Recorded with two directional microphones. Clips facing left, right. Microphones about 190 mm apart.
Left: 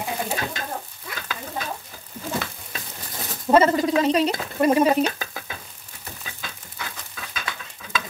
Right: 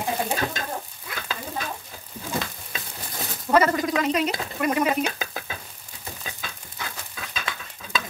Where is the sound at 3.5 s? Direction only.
25° left (ahead or behind).